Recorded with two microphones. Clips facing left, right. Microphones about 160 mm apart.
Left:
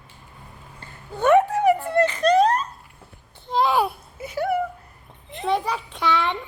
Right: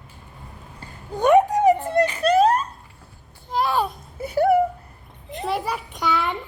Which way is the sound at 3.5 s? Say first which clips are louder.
Left 2 dB; 25° left (ahead or behind).